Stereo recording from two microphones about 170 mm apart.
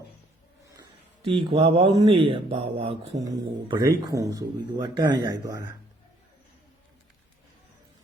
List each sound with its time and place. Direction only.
0.8 s a sound: 30° right (ahead or behind)
2.0 s speech: 30° right (ahead or behind)
3.2 s speech: 20° right (ahead or behind)